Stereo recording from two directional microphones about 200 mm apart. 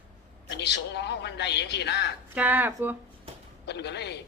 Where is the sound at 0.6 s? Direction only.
60° left (ahead or behind).